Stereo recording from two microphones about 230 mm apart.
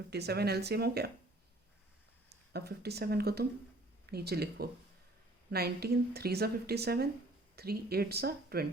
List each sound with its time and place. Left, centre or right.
0.1 s speech: right
2.5 s speech: right